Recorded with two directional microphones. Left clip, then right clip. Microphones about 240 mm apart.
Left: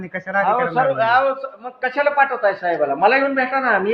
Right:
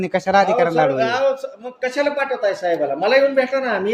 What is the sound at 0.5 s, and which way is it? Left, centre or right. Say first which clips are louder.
Speech: right 1 dB; right.